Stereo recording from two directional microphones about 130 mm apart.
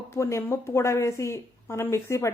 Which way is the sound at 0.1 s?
20° left (ahead or behind).